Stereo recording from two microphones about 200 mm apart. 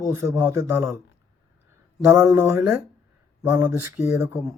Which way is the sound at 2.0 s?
15° right (ahead or behind).